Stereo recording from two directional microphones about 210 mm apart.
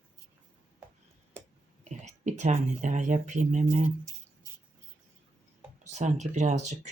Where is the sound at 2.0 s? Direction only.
35° right (ahead or behind).